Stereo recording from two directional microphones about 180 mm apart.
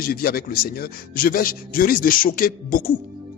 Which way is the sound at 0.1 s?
55° left (ahead or behind).